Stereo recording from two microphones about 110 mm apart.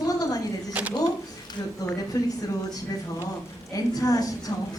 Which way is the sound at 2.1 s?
35° left (ahead or behind).